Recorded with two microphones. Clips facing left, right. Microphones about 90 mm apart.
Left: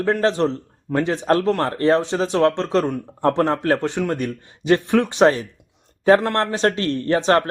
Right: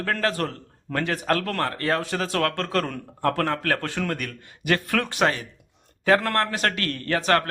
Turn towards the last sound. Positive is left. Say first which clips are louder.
# left 5 dB
turn(degrees=25)  # may be behind; listen again after turning